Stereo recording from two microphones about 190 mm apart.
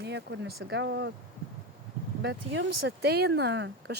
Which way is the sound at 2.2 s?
65° right (ahead or behind).